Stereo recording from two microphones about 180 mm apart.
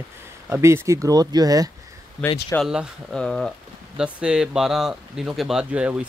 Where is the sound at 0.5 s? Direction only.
15° right (ahead or behind).